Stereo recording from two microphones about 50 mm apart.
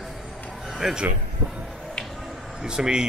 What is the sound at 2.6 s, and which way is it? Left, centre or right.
Speech, centre.